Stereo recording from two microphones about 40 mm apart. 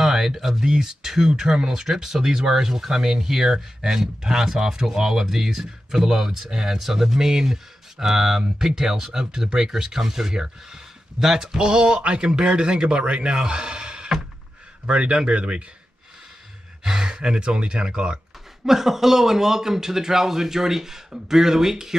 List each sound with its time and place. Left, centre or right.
0.0 s speech: centre
11.5 s a man's voice: right
16.8 s a man's voice: centre
18.7 s speech: centre